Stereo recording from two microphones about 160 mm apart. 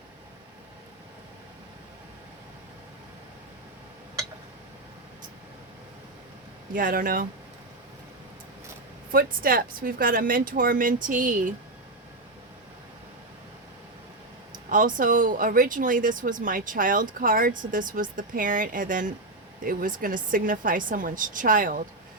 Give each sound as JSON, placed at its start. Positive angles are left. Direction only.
{"t": 6.7, "sound": "speech", "side_deg": -60}
{"t": 9.1, "sound": "speech", "side_deg": -65}
{"t": 14.5, "sound": "speech", "side_deg": -55}